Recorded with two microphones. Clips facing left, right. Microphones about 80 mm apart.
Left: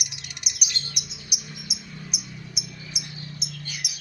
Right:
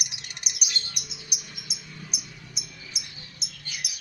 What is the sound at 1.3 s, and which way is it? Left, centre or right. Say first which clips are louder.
Cricket: left 5 dB; centre.